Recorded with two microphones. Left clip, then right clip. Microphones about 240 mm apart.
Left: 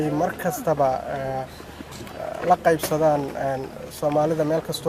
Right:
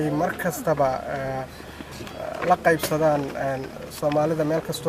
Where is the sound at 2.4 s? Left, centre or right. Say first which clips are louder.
Left 1 dB; centre.